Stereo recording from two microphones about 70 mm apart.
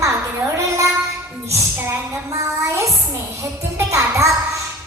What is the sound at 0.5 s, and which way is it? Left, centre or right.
Child singing, right.